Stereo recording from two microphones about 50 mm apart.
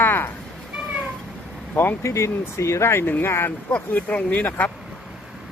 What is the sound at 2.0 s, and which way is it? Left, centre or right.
Speech, left.